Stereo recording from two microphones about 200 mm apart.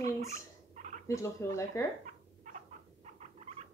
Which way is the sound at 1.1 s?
15° left (ahead or behind).